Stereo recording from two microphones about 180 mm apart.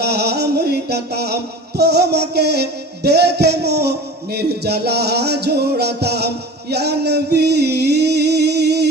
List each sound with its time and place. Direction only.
0.0 s music: 65° right (ahead or behind)